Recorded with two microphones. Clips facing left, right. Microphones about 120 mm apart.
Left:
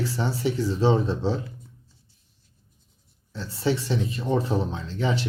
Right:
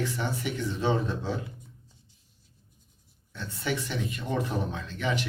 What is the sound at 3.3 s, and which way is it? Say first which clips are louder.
Speech: left 6 dB; 30° left (ahead or behind).